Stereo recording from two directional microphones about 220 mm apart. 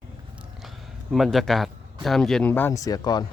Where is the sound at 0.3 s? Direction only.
Centre (ahead or behind).